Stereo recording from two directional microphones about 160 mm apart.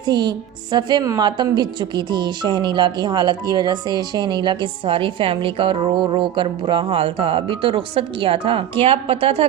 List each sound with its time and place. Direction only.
0.0 s a woman's voice: 30° right (ahead or behind)